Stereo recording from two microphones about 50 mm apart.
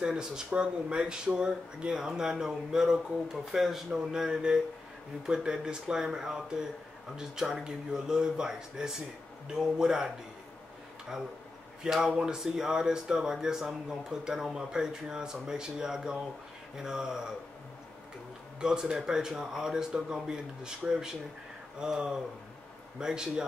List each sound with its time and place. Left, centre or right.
0.0 s speech: centre
11.8 s speech: centre
18.6 s speech: centre